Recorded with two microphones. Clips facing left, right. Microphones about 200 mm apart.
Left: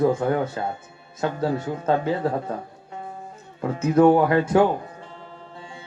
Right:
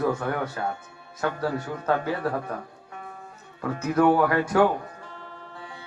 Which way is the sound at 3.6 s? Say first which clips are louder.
Left 5 dB; 25° left (ahead or behind).